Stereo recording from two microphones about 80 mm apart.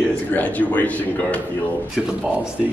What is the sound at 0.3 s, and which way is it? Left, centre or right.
Speech, centre.